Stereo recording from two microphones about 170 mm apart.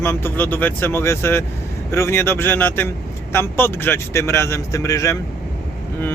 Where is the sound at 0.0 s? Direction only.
15° left (ahead or behind).